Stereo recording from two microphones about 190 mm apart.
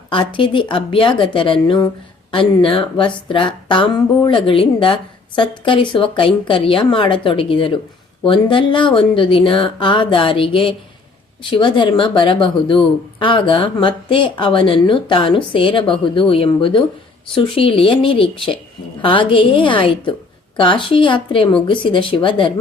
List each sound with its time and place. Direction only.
0.1 s speech: 25° left (ahead or behind)